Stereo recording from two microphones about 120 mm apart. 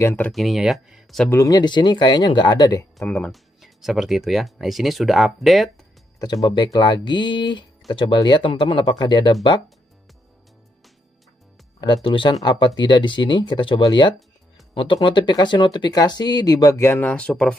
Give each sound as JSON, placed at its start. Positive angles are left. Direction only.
{"t": 0.0, "sound": "speech", "side_deg": 15}
{"t": 0.3, "sound": "speech", "side_deg": 0}
{"t": 1.3, "sound": "speech", "side_deg": 30}
{"t": 3.3, "sound": "speech", "side_deg": 0}
{"t": 6.1, "sound": "speech", "side_deg": 35}
{"t": 11.8, "sound": "speech", "side_deg": 40}
{"t": 16.7, "sound": "speech", "side_deg": 20}
{"t": 17.1, "sound": "speech", "side_deg": 10}